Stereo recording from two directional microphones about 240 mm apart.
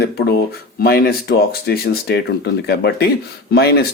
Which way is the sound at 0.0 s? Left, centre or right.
Left.